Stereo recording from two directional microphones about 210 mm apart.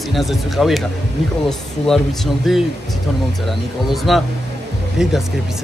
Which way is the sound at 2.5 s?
Centre (ahead or behind).